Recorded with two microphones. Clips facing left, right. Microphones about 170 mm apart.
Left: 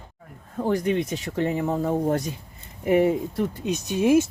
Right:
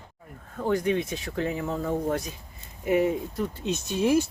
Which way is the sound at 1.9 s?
45° left (ahead or behind).